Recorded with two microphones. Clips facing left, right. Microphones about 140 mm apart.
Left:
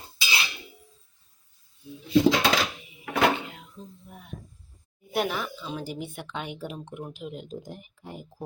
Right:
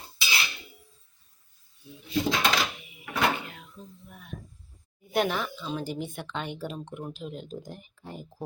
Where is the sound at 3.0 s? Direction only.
20° left (ahead or behind).